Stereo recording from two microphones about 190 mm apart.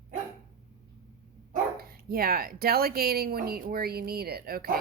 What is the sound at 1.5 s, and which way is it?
Speech, 55° right (ahead or behind).